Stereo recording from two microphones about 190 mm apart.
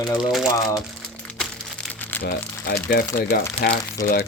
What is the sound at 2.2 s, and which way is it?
Speech, 55° left (ahead or behind).